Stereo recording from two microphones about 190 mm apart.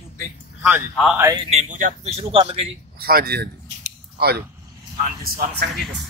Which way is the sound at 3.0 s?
55° right (ahead or behind).